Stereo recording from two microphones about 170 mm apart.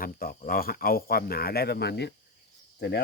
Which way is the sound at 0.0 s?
55° left (ahead or behind).